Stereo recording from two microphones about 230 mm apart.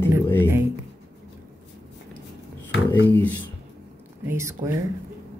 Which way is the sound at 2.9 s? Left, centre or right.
Centre.